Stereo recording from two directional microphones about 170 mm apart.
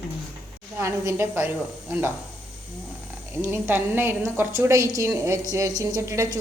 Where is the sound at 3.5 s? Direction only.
15° right (ahead or behind).